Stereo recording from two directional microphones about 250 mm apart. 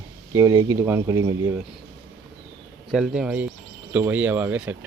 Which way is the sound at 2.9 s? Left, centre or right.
Centre.